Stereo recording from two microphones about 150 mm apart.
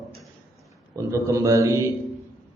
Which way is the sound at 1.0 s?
20° right (ahead or behind).